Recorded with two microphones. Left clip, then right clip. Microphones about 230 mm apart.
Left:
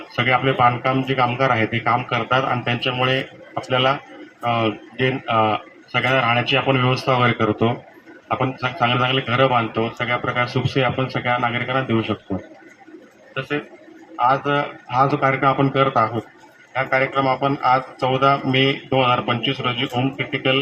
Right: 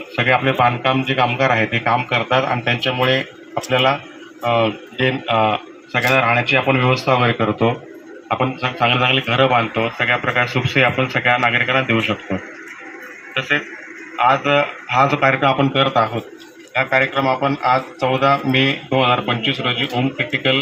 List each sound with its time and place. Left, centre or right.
0.3 s a man's voice: centre
14.2 s speech: centre